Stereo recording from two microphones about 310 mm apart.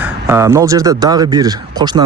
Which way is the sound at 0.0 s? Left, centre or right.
Centre.